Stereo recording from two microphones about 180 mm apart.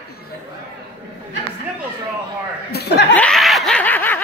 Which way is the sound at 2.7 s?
65° left (ahead or behind).